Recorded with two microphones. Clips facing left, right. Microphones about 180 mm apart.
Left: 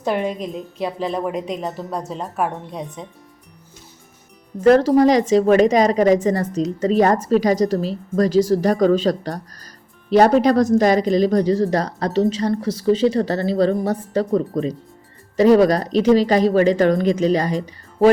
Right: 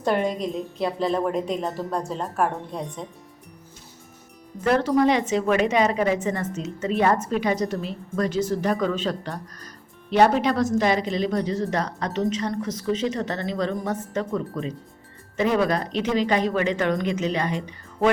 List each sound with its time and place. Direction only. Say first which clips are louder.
0.0 s speech: left 1 dB; 5° left (ahead or behind)
4.5 s a woman's voice: left 7 dB; 30° left (ahead or behind)